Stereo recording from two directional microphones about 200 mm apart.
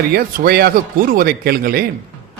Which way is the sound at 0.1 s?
50° right (ahead or behind).